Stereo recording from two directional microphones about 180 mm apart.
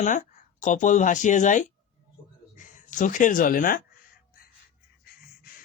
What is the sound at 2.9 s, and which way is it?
Speech, 45° left (ahead or behind).